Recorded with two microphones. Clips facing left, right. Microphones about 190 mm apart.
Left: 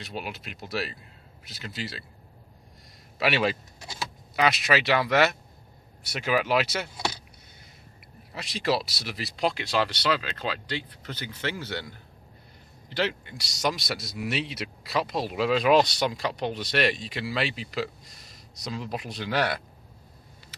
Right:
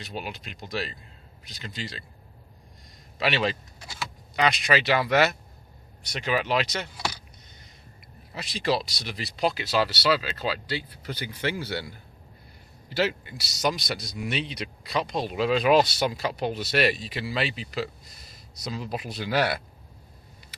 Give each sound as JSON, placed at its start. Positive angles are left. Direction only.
{"t": 0.0, "sound": "speech", "side_deg": 0}
{"t": 3.2, "sound": "speech", "side_deg": 5}
{"t": 6.9, "sound": "vehicle", "side_deg": 20}
{"t": 8.3, "sound": "speech", "side_deg": 0}